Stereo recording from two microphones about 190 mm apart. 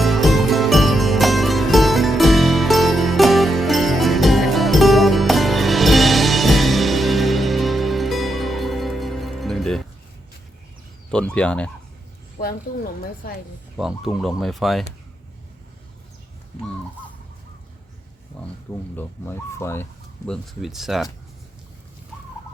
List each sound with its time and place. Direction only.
0.0 s music: centre (ahead or behind)
11.1 s speech: 5° left (ahead or behind)
12.4 s speech: 50° left (ahead or behind)
13.7 s speech: centre (ahead or behind)
18.4 s speech: 5° left (ahead or behind)